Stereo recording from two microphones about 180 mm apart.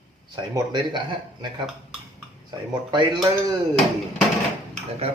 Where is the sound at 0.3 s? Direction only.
25° right (ahead or behind).